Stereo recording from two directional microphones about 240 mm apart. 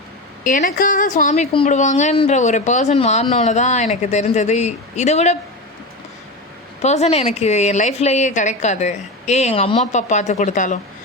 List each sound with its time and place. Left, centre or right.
0.4 s a woman's voice: left
6.8 s a woman's voice: left